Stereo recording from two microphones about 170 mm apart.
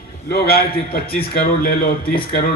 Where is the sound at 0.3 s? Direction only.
65° left (ahead or behind).